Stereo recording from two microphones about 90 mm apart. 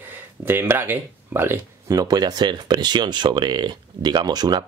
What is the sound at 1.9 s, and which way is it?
Speech, 45° right (ahead or behind).